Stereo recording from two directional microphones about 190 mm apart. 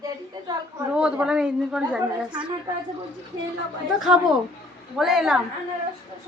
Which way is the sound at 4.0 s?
Centre (ahead or behind).